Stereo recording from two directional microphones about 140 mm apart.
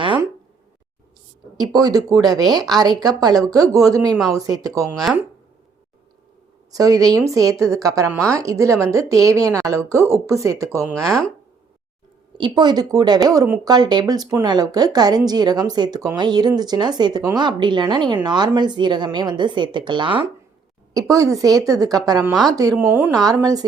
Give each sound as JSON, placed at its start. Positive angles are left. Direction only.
{"t": 1.5, "sound": "a woman's voice", "side_deg": -25}
{"t": 6.7, "sound": "a woman's voice", "side_deg": -25}
{"t": 12.4, "sound": "a woman's voice", "side_deg": -30}
{"t": 20.9, "sound": "a woman's voice", "side_deg": -20}
{"t": 22.8, "sound": "a woman's voice", "side_deg": -15}
{"t": 23.1, "sound": "a woman's voice", "side_deg": -25}